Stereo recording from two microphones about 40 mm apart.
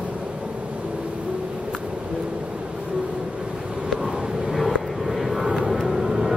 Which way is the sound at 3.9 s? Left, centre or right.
Centre.